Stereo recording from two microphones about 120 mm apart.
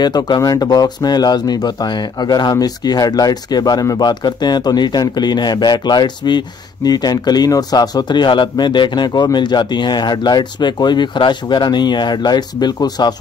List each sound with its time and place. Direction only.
0.0 s speech: 35° left (ahead or behind)